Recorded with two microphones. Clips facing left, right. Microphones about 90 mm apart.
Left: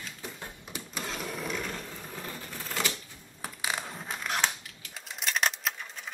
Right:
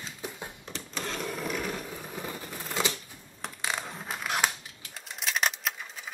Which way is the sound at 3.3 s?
5° left (ahead or behind).